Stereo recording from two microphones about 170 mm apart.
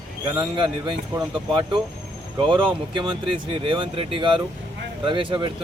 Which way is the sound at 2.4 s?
30° right (ahead or behind).